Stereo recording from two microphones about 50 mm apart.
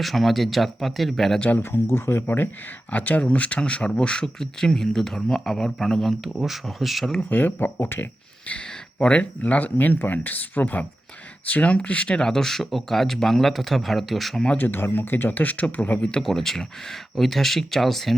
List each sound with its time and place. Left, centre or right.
0.0 s speech: centre
1.5 s speech: left
2.9 s speech: left; by 7.1 s centre
7.3 s speech: left
8.4 s speech: left; by 14.4 s centre
14.6 s speech: left
16.2 s speech: centre